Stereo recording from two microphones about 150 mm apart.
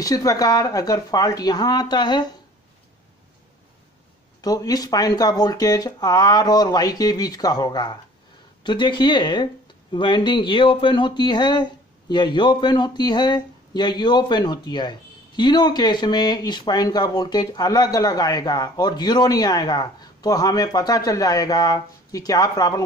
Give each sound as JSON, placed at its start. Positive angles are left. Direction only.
{"t": 0.0, "sound": "speech", "side_deg": 25}
{"t": 4.4, "sound": "speech", "side_deg": 25}